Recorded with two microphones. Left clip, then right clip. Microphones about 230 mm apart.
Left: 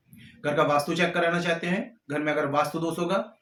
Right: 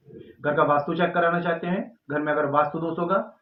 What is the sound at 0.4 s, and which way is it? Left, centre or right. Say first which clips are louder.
Speech: right 2 dB; left.